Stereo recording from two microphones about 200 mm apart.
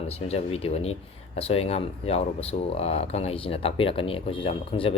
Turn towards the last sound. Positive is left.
turn(degrees=30)  # may be behind; listen again after turning